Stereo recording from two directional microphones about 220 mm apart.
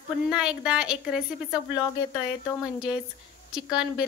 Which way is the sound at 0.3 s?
5° right (ahead or behind).